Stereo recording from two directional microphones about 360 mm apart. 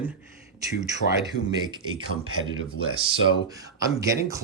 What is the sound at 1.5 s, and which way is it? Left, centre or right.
Speech, centre.